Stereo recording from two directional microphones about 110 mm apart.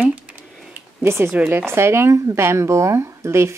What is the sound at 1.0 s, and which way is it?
Speech, 25° right (ahead or behind).